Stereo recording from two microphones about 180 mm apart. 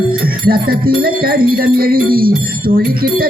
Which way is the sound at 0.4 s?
55° right (ahead or behind).